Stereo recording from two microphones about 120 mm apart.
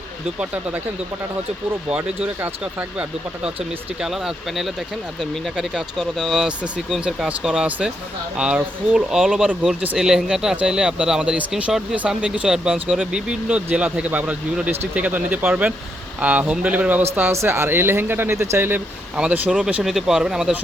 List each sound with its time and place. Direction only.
0.3 s speech: 10° right (ahead or behind)
1.9 s speech: 10° right (ahead or behind)
4.0 s speech: centre (ahead or behind); by 18.8 s 20° right (ahead or behind)
19.1 s speech: 10° right (ahead or behind)